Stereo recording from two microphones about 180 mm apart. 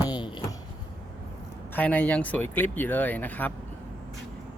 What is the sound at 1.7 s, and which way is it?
Speech, 10° left (ahead or behind).